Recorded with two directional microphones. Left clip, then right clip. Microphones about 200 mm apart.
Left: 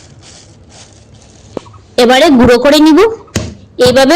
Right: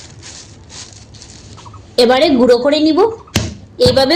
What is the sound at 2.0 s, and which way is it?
Speech, 35° left (ahead or behind).